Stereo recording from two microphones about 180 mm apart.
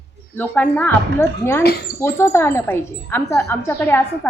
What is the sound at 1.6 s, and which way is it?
Speech, 65° left (ahead or behind).